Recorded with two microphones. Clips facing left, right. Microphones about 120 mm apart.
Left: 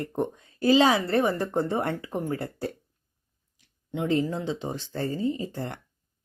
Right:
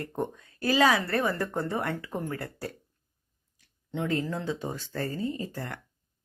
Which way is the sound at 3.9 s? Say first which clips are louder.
Left 4 dB; 20° left (ahead or behind).